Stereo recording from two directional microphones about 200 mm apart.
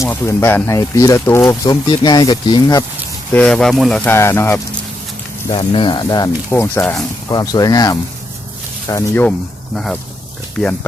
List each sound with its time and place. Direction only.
0.0 s speech: 15° left (ahead or behind)
3.3 s speech: 5° left (ahead or behind)
5.5 s speech: 25° left (ahead or behind); by 10.0 s 5° left (ahead or behind)